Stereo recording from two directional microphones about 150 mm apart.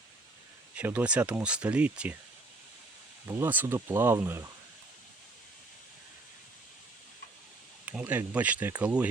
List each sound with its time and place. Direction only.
0.7 s speech: 10° right (ahead or behind)
3.2 s speech: 15° right (ahead or behind)
7.9 s speech: 10° right (ahead or behind)